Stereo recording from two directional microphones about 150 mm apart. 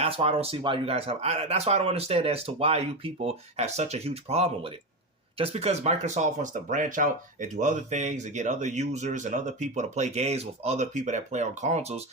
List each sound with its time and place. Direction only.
0.0 s speech: 40° right (ahead or behind)